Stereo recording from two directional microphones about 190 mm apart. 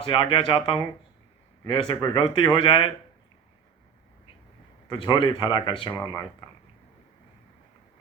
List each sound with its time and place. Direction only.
0.0 s speech: 30° left (ahead or behind)
4.9 s speech: 25° left (ahead or behind)